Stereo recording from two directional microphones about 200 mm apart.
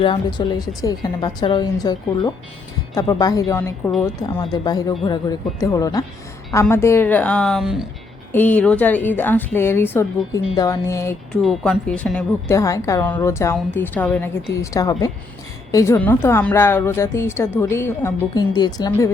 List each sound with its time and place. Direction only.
0.0 s a woman's voice: 25° left (ahead or behind); by 7.9 s centre (ahead or behind)
8.3 s a woman's voice: 10° left (ahead or behind)
11.4 s speech: centre (ahead or behind)
12.5 s a woman's voice: 15° left (ahead or behind)